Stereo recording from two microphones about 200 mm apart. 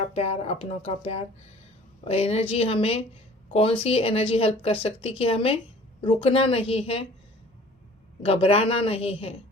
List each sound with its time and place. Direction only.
0.0 s speech: 30° left (ahead or behind)
8.2 s speech: 30° left (ahead or behind)